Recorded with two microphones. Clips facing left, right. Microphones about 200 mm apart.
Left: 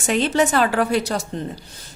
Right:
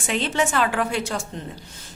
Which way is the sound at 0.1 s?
40° left (ahead or behind).